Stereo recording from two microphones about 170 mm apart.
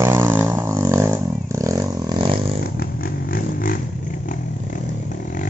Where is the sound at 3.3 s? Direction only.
55° left (ahead or behind).